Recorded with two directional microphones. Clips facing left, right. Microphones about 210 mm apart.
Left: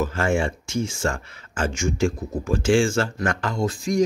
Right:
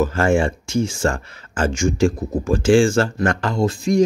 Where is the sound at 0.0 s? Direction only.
35° right (ahead or behind).